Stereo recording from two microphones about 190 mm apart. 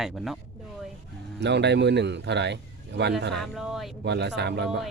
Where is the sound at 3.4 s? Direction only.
Centre (ahead or behind).